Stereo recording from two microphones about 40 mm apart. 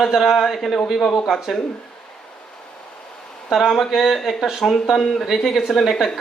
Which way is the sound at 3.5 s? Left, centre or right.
Centre.